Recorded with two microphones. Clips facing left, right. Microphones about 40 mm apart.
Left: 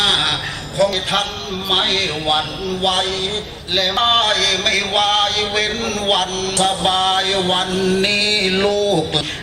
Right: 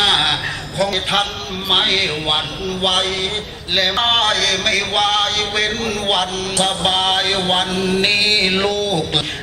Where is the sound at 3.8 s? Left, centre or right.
Centre.